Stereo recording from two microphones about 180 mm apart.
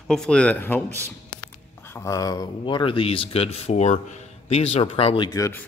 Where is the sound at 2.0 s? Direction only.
20° left (ahead or behind).